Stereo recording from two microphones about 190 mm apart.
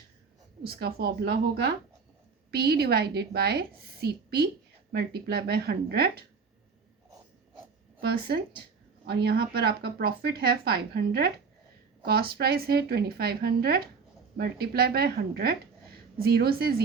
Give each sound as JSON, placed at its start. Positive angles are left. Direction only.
{"t": 0.6, "sound": "speech", "side_deg": -55}
{"t": 8.0, "sound": "speech", "side_deg": -55}